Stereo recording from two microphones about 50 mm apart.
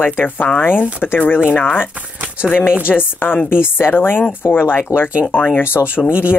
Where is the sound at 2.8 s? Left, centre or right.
Left.